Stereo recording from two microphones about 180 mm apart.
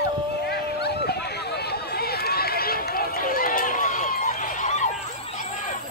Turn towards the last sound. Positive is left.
turn(degrees=45)  # may be behind; listen again after turning